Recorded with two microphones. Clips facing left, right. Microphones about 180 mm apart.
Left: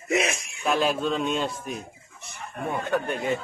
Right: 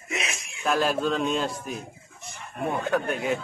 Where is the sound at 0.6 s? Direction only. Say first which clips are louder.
Even; centre (ahead or behind).